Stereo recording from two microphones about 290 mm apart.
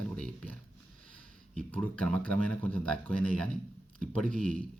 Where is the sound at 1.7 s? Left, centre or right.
Centre.